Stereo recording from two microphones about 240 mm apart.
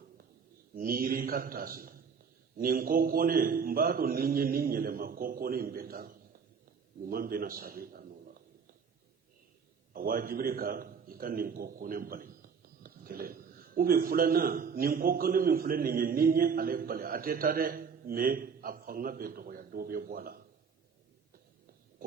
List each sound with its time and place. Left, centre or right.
0.8 s a man's voice: right
9.9 s a man's voice: right